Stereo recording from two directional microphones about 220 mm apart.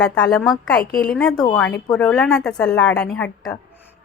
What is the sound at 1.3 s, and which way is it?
Speech, 20° left (ahead or behind).